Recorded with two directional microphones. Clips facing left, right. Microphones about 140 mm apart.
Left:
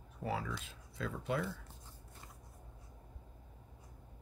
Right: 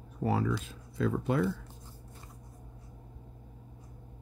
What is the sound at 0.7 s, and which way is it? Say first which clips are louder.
Speech: right 11 dB; 45° right (ahead or behind).